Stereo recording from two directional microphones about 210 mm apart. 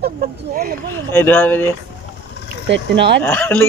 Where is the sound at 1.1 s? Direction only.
10° left (ahead or behind).